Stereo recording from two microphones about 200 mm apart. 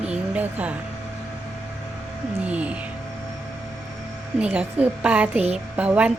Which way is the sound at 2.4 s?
5° right (ahead or behind).